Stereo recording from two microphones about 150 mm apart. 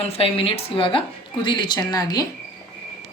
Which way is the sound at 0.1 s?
40° left (ahead or behind).